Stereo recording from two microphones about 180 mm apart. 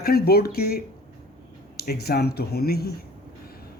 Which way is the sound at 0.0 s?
60° left (ahead or behind).